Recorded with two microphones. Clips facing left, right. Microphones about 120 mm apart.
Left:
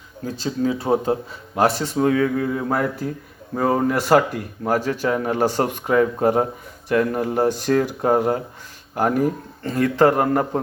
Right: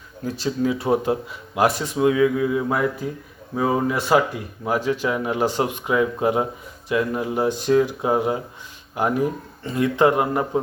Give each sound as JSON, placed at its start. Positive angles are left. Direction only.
{"t": 0.4, "sound": "speech", "side_deg": 30}
{"t": 2.0, "sound": "speech", "side_deg": 45}